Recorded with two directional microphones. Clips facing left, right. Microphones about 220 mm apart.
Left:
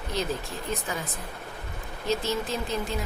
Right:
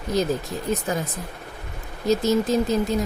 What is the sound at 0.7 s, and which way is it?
Speech, 40° right (ahead or behind).